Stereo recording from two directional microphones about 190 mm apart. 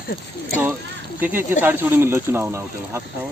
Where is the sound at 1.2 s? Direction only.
10° right (ahead or behind).